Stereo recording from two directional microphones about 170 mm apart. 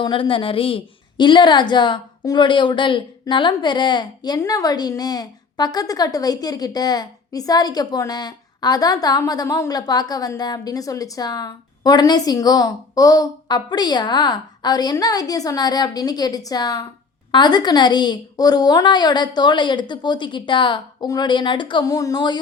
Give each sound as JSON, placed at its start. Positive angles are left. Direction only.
{"t": 0.0, "sound": "a woman's voice", "side_deg": 30}